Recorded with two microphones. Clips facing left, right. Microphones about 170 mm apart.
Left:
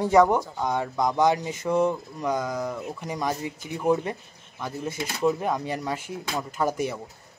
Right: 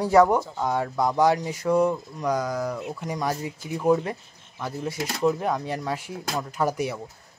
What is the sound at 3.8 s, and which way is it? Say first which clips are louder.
Speech: right 2 dB; centre (ahead or behind).